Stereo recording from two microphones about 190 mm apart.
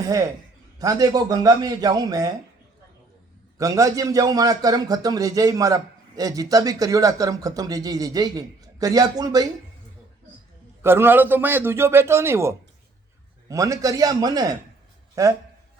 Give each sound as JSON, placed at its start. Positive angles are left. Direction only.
{"t": 0.0, "sound": "a man's voice", "side_deg": -20}
{"t": 3.6, "sound": "a man's voice", "side_deg": -15}
{"t": 10.8, "sound": "a man's voice", "side_deg": -10}